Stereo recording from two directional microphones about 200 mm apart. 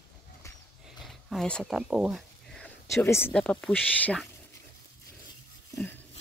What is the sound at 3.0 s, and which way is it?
Speech, 10° left (ahead or behind).